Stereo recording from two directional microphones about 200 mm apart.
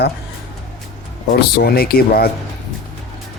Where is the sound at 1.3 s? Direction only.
50° left (ahead or behind).